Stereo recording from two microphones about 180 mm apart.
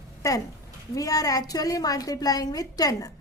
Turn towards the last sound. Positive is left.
turn(degrees=20)  # may be behind; listen again after turning